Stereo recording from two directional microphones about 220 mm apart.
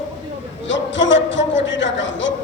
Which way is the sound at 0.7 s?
55° left (ahead or behind).